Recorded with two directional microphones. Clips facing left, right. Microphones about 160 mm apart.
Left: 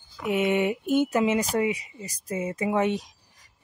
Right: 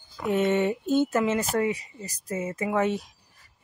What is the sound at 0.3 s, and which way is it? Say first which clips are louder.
Speech: even; 15° left (ahead or behind).